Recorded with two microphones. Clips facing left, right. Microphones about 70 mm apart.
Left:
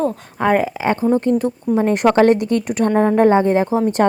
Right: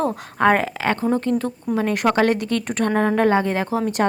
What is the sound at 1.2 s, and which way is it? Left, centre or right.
A woman's voice, left.